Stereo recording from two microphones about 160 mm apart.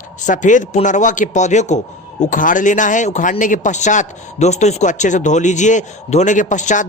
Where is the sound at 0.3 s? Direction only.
50° left (ahead or behind).